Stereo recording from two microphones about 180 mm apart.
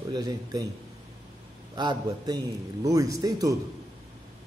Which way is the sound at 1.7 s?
25° right (ahead or behind).